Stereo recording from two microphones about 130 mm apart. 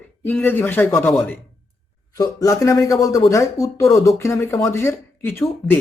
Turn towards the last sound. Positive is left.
turn(degrees=0)  # may be behind; listen again after turning